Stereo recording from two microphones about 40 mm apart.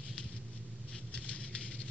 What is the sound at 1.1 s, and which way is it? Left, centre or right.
Patter, left.